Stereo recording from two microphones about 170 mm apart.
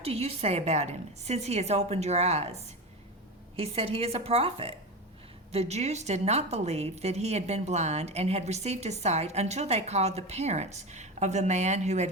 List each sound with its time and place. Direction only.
0.0 s a woman's voice: 35° right (ahead or behind)